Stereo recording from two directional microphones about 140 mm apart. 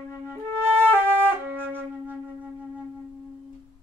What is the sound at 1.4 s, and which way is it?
Wind instrument, 15° right (ahead or behind).